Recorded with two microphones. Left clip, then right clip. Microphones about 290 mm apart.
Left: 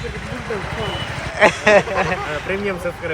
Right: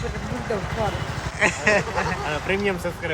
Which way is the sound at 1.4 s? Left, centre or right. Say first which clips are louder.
Left 7 dB; centre.